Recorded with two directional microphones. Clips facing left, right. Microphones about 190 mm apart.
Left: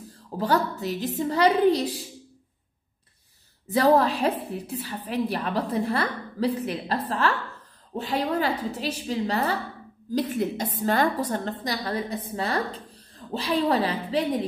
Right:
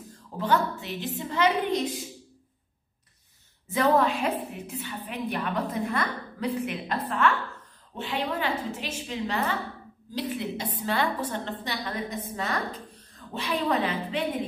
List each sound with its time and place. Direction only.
0.4 s a woman's voice: 40° left (ahead or behind)
3.6 s a woman's voice: 35° left (ahead or behind)